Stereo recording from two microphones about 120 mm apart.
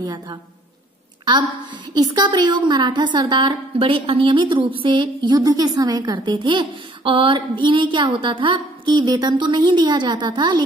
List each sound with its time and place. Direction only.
0.0 s a woman's voice: 35° right (ahead or behind)
2.0 s a woman's voice: 35° right (ahead or behind)